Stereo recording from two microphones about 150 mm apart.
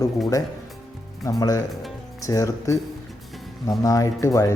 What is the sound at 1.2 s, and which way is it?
Speech, 25° left (ahead or behind).